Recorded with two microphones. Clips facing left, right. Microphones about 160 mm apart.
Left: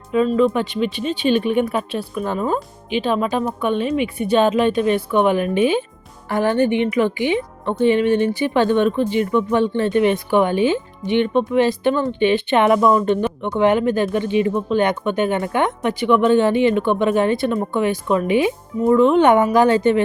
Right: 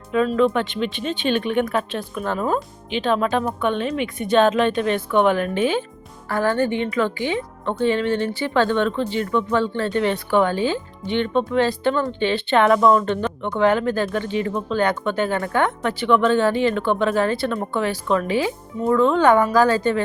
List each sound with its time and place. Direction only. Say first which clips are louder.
0.1 s speech: left 2 dB; 5° left (ahead or behind); by 20.0 s 20° left (ahead or behind)